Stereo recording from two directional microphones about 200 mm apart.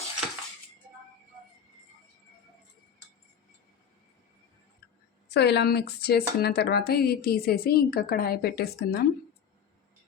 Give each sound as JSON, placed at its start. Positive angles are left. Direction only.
{"t": 5.3, "sound": "speech", "side_deg": 55}